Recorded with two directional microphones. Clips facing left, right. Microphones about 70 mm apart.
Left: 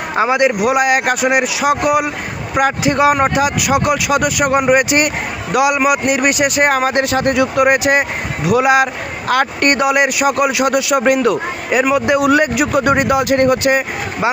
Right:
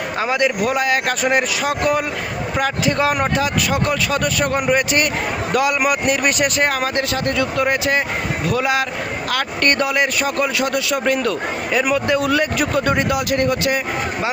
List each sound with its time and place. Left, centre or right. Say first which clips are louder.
0.2 s a man's voice: left 6 dB; centre
6.7 s speech: left 6 dB; left